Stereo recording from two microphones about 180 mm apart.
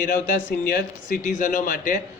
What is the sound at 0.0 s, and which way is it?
Speech, 50° left (ahead or behind).